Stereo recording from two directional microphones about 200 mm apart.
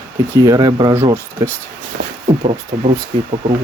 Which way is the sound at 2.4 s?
30° right (ahead or behind).